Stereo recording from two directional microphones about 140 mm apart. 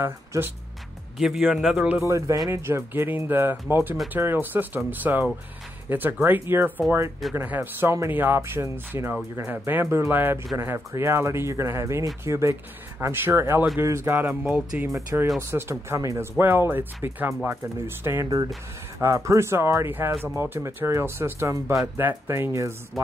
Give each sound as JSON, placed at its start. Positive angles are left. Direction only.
{"t": 0.0, "sound": "speech", "side_deg": -15}
{"t": 1.1, "sound": "a man's voice", "side_deg": -5}
{"t": 2.0, "sound": "speech", "side_deg": -20}
{"t": 6.8, "sound": "a man's voice", "side_deg": 0}
{"t": 7.3, "sound": "speech", "side_deg": -15}